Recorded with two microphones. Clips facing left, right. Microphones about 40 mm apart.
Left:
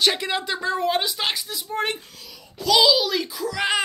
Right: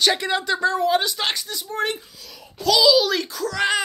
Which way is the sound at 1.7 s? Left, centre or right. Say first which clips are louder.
Right 1 dB; left.